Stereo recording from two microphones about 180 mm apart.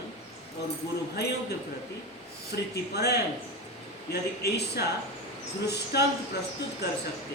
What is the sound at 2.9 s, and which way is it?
Speech, 65° left (ahead or behind).